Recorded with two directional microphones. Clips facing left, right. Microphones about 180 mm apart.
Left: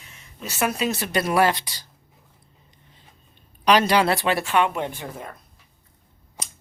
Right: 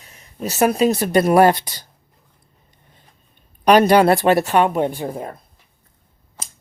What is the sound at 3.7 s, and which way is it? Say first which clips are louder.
Speech: right 6 dB; 50° right (ahead or behind).